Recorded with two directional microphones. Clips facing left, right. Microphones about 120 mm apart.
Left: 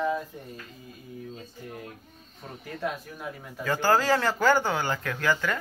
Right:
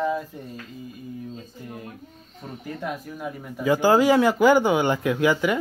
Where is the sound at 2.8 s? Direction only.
10° right (ahead or behind).